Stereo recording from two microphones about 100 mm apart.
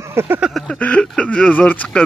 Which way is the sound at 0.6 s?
10° left (ahead or behind).